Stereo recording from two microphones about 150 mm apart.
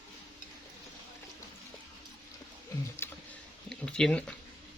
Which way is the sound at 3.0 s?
15° left (ahead or behind).